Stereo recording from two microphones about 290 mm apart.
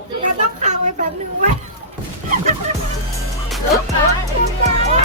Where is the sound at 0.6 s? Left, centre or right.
Right.